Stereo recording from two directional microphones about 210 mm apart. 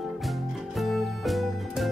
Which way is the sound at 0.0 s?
Centre (ahead or behind).